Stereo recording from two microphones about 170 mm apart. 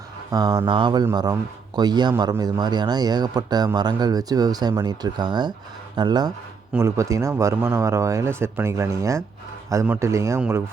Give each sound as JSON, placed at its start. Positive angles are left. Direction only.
{"t": 0.3, "sound": "a man's voice", "side_deg": -20}